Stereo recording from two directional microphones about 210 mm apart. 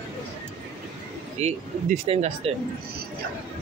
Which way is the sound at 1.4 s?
30° right (ahead or behind).